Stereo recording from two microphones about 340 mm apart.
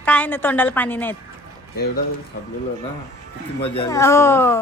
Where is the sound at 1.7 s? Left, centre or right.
Left.